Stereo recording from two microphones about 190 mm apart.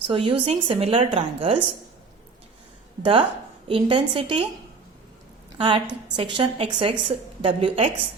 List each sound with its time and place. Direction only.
0.1 s a woman's voice: 30° right (ahead or behind)
3.0 s a woman's voice: 25° right (ahead or behind)
5.5 s a woman's voice: 25° right (ahead or behind)